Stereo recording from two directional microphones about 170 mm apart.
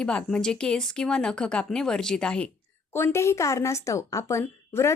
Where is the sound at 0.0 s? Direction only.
5° left (ahead or behind).